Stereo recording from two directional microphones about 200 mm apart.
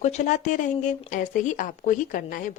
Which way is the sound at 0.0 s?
35° left (ahead or behind).